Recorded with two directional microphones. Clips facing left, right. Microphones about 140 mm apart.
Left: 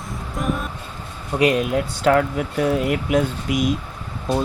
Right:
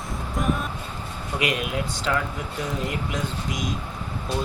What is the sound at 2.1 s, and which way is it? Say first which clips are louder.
Speech: left 8 dB; 60° left (ahead or behind).